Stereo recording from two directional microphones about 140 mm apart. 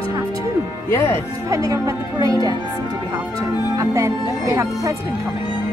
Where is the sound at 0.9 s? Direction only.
15° left (ahead or behind).